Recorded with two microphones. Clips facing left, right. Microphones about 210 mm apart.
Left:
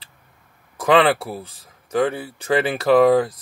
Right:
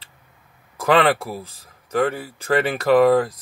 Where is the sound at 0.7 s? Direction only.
30° left (ahead or behind).